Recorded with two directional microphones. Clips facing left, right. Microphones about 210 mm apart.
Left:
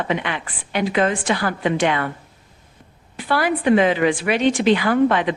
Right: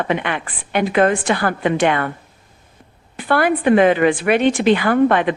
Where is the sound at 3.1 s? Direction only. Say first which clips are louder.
Right 4 dB; 55° right (ahead or behind).